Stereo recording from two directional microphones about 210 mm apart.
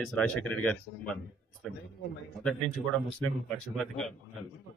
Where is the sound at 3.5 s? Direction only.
5° left (ahead or behind).